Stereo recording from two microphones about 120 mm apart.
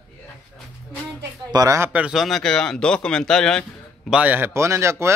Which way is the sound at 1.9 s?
10° right (ahead or behind).